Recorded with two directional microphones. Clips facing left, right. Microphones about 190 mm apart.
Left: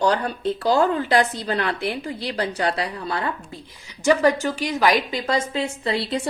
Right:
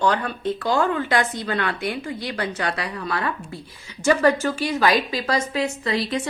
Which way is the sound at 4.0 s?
15° left (ahead or behind).